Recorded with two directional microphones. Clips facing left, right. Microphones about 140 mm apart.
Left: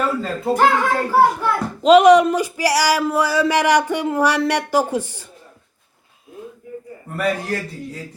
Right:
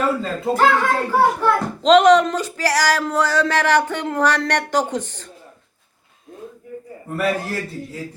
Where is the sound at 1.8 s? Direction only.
10° left (ahead or behind).